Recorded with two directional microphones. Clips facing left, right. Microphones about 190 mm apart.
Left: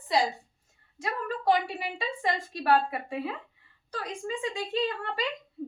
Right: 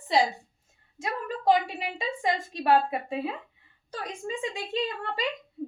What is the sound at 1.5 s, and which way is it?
A woman's voice, 20° right (ahead or behind).